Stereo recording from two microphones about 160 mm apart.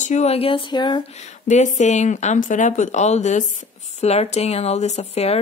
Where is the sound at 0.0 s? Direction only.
45° left (ahead or behind); by 1.1 s 30° left (ahead or behind).